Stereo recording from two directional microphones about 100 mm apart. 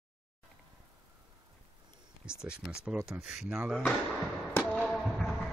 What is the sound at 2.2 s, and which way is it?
A man's voice, 10° right (ahead or behind).